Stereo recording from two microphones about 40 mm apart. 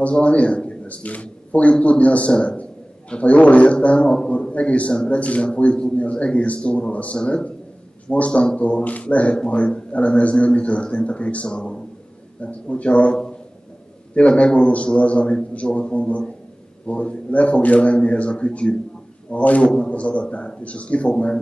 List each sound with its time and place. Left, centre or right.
0.0 s a man's voice: left
12.4 s a man's voice: left